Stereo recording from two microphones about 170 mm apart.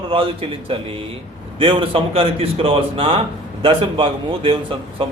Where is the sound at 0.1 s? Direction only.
30° right (ahead or behind).